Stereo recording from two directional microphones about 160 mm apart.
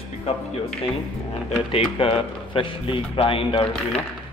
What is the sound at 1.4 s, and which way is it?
Speech, 35° left (ahead or behind).